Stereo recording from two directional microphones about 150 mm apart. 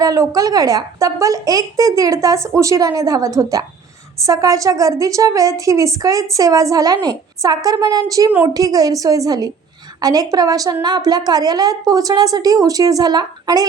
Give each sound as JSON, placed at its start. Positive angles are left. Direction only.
{"t": 0.0, "sound": "a woman's voice", "side_deg": -25}